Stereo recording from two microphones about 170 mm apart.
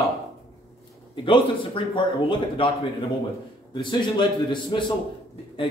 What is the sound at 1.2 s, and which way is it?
A man's voice, 30° left (ahead or behind).